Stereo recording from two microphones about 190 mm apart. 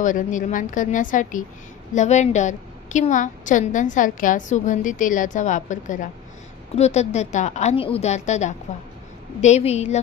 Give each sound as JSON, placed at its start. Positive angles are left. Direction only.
{"t": 0.0, "sound": "a woman's voice", "side_deg": 40}